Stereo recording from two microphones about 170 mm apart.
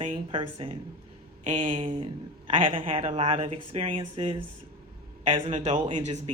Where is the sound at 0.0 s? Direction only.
35° right (ahead or behind).